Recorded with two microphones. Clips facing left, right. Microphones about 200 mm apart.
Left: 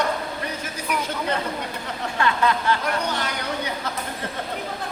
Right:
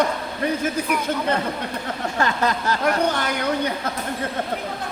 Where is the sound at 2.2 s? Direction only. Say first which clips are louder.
Left 1 dB; 40° right (ahead or behind).